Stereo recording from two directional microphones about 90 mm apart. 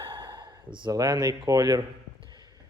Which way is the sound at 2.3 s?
50° right (ahead or behind).